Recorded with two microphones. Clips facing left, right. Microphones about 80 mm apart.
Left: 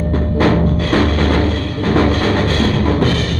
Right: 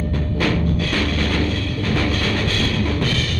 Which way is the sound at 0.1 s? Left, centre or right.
Left.